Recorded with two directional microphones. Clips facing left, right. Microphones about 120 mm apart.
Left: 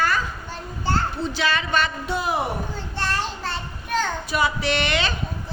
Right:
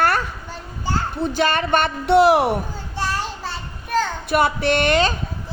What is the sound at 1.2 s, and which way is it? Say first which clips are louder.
A man's voice: right 4 dB; 50° right (ahead or behind).